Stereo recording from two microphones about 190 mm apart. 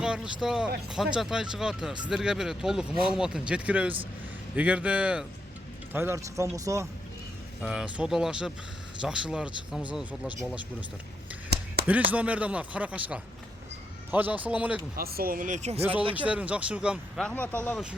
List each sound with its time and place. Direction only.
0.0 s speech: 5° right (ahead or behind)
7.6 s speech: 5° right (ahead or behind)
11.8 s a sound: 60° right (ahead or behind)
12.1 s speech: 5° right (ahead or behind)
14.9 s speech: 50° right (ahead or behind)
16.1 s speech: 5° right (ahead or behind)